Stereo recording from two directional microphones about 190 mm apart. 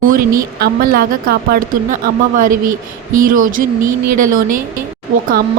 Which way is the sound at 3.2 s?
45° right (ahead or behind).